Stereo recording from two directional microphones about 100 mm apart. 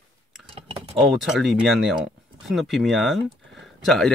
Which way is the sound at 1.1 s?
Centre (ahead or behind).